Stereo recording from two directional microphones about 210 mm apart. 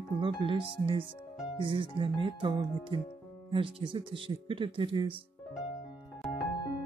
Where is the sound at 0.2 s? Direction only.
25° right (ahead or behind).